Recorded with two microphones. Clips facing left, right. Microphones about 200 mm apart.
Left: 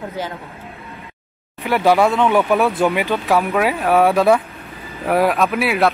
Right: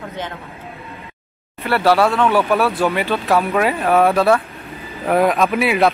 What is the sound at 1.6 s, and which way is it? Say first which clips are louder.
Speech: even; 15° left (ahead or behind).